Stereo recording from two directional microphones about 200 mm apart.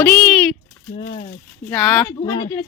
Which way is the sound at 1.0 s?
35° left (ahead or behind).